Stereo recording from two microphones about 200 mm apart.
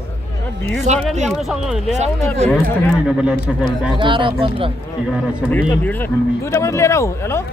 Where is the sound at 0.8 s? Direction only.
35° right (ahead or behind).